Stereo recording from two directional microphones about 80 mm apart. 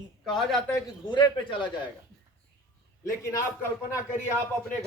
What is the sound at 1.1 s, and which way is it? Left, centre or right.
Speech, left.